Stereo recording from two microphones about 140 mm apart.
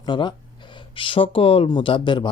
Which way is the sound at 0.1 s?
35° left (ahead or behind).